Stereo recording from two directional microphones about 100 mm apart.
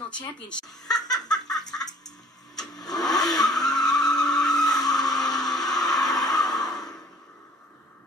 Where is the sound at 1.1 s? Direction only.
5° left (ahead or behind).